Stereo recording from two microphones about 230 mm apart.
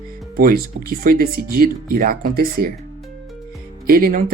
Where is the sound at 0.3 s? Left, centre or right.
Right.